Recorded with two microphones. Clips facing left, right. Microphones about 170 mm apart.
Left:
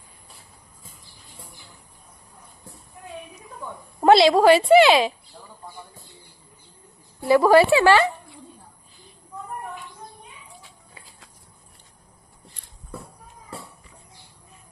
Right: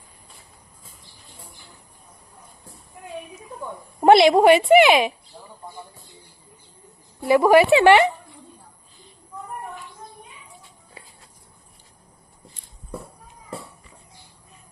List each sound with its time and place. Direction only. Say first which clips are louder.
4.0 s speech: right 1 dB; 20° right (ahead or behind)
7.2 s speech: even; 20° right (ahead or behind)